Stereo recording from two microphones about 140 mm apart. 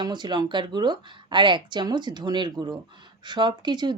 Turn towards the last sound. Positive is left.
turn(degrees=-30)  # may be behind; listen again after turning